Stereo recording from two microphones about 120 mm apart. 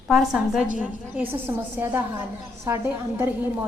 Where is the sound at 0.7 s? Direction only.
15° right (ahead or behind).